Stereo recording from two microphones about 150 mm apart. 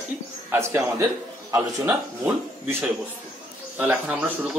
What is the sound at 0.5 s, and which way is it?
Speech, 20° right (ahead or behind).